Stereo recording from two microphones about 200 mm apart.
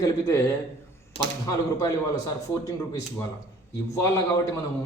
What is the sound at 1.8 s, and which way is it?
A man's voice, 15° left (ahead or behind).